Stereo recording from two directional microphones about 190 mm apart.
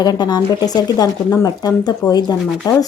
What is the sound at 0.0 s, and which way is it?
Speech, 20° left (ahead or behind).